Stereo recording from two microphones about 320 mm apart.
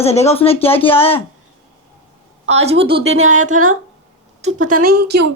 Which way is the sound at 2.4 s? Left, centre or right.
Centre.